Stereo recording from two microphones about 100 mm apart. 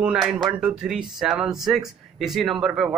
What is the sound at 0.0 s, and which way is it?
Speech, 10° right (ahead or behind).